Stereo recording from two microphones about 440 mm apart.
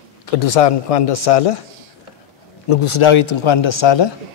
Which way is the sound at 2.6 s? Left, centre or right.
Left.